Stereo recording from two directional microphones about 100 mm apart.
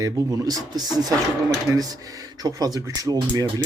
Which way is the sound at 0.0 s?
40° right (ahead or behind).